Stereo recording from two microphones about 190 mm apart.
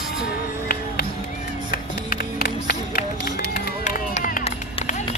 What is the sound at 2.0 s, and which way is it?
Music, 55° left (ahead or behind).